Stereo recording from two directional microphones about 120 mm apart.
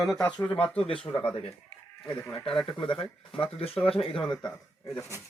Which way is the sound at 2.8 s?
45° left (ahead or behind).